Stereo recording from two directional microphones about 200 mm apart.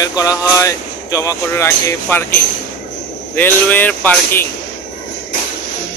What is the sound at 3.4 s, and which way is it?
Speech, 10° left (ahead or behind).